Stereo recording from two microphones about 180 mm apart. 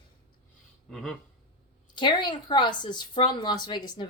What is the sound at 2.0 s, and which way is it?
Speech, 25° left (ahead or behind).